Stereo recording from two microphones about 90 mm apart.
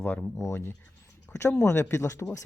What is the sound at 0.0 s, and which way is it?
Speech, 15° left (ahead or behind).